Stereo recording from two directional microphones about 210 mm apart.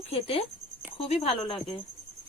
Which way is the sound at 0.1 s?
25° left (ahead or behind).